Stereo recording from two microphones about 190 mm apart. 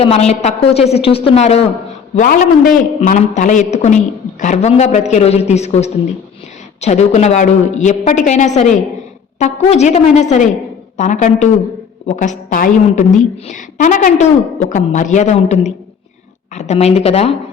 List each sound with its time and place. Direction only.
0.0 s a man's voice: 30° left (ahead or behind)
2.1 s a man's voice: 45° left (ahead or behind)